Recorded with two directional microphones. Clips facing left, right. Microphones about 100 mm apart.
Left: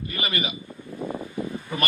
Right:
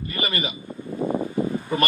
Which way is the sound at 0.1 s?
35° right (ahead or behind).